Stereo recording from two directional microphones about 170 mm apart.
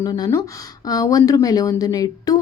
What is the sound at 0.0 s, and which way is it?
Speech, 20° left (ahead or behind).